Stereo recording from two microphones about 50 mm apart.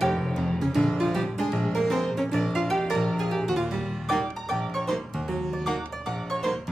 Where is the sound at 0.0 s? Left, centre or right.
Centre.